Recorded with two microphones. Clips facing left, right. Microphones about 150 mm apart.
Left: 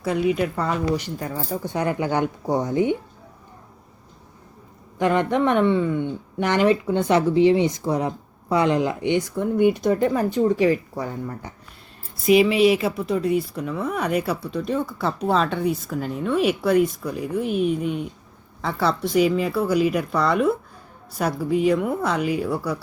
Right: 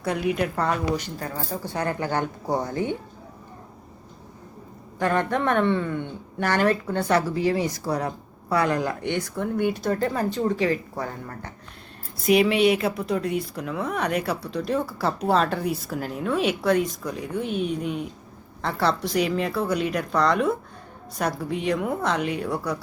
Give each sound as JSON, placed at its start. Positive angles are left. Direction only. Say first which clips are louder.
{"t": 0.0, "sound": "speech", "louder": "left 3 dB", "side_deg": 0}
{"t": 0.9, "sound": "speech", "louder": "left 3 dB", "side_deg": 15}
{"t": 4.9, "sound": "speech", "louder": "left 3 dB", "side_deg": 15}
{"t": 12.2, "sound": "speech", "louder": "left 3 dB", "side_deg": 0}